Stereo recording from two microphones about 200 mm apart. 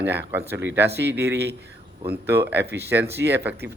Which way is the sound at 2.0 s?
10° right (ahead or behind).